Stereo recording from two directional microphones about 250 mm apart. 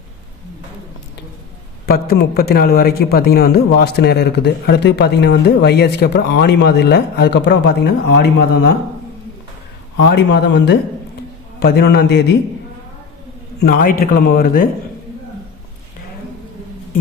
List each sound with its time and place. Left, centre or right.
1.9 s a man's voice: left
10.1 s a man's voice: left
13.6 s a man's voice: left